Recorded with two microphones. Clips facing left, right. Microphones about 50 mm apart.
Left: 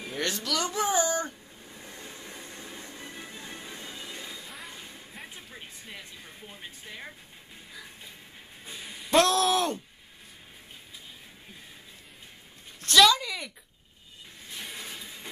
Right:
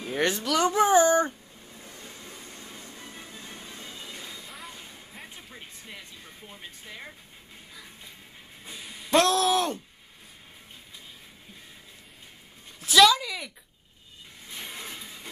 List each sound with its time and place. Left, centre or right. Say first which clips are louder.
0.0 s speech: right 5 dB; right
1.7 s train: left 1 dB; left
3.2 s music: left 1 dB; left
4.3 s train: even; centre
5.1 s a sound: even; centre
8.9 s speech: even; centre
12.8 s speech: right 2 dB; centre
14.7 s a sound: right 1 dB; centre